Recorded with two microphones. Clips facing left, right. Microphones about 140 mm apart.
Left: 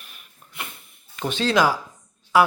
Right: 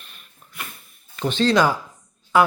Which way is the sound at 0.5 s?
20° left (ahead or behind).